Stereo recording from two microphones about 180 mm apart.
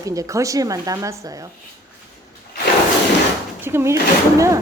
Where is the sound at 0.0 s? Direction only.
20° right (ahead or behind).